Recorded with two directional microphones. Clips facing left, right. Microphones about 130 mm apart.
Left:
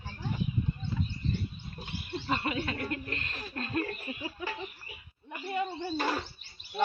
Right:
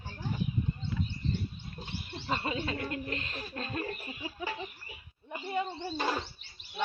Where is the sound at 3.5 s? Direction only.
5° right (ahead or behind).